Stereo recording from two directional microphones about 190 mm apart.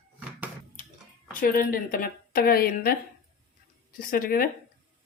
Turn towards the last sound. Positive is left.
turn(degrees=50)  # may be behind; listen again after turning